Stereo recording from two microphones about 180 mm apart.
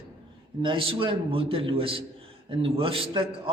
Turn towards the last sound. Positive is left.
turn(degrees=-30)  # may be behind; listen again after turning